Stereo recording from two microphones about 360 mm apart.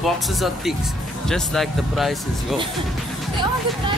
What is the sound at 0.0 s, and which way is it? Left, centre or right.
Speech, centre.